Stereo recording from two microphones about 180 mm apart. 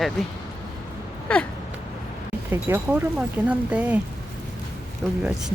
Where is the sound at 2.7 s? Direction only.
15° right (ahead or behind).